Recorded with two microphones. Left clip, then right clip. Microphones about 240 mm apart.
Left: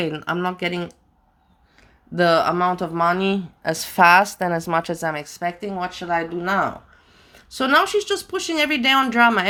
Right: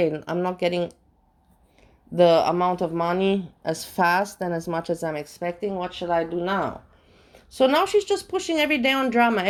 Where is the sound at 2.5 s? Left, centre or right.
Centre.